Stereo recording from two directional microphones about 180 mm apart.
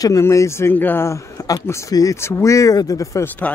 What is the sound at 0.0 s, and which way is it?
Speech, 20° left (ahead or behind).